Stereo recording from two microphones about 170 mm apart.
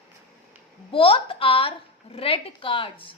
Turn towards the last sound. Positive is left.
turn(degrees=30)  # may be behind; listen again after turning